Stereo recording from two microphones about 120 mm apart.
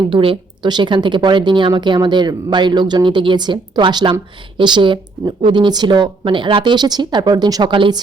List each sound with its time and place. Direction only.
0.0 s a woman's voice: 45° right (ahead or behind)